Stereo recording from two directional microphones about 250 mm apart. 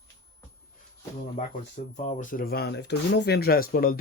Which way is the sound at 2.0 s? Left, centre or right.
Left.